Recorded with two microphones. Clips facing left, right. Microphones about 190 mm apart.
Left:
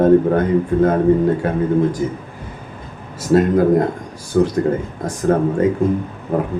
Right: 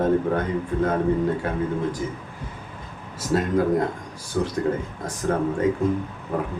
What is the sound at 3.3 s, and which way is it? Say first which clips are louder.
Speech: left 8 dB; 50° left (ahead or behind).